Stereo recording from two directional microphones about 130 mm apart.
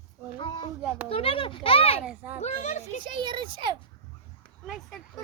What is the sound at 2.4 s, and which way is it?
Speech, 60° left (ahead or behind).